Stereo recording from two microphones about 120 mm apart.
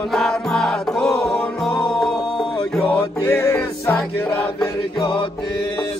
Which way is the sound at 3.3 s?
20° left (ahead or behind).